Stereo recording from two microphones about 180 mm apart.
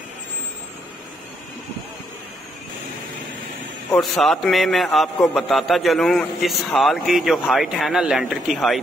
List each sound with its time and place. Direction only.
4.0 s a man's voice: centre (ahead or behind)